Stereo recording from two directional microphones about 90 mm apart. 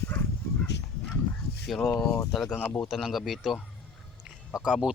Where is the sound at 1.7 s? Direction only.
Centre (ahead or behind).